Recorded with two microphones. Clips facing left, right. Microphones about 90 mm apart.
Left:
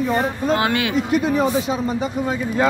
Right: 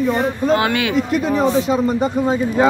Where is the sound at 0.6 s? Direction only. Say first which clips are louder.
Right 2 dB; 30° left (ahead or behind).